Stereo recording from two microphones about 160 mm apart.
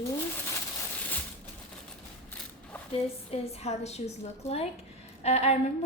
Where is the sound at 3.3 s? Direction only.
45° left (ahead or behind).